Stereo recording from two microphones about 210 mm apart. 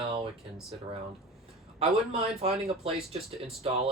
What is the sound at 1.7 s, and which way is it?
Speech, 30° right (ahead or behind).